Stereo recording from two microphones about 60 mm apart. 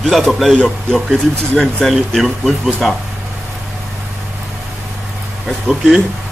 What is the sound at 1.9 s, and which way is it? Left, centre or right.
Speech, centre.